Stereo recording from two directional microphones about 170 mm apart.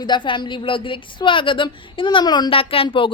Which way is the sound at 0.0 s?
25° left (ahead or behind).